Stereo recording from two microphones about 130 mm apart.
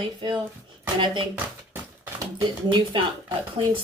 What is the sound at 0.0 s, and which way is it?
A woman's voice, 35° right (ahead or behind).